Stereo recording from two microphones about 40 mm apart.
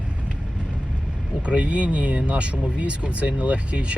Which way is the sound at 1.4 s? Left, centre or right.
Right.